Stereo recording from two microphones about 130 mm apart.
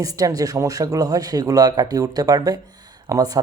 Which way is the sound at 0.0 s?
30° right (ahead or behind).